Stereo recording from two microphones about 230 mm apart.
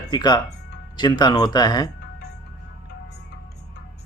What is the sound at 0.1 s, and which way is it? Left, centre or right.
Speech, centre.